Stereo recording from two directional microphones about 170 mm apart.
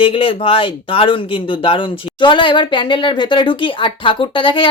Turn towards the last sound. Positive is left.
turn(degrees=30)  # may be behind; listen again after turning